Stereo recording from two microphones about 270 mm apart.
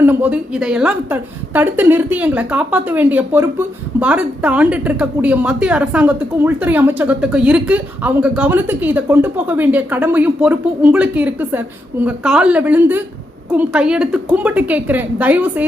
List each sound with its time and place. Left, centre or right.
0.0 s a woman's voice: centre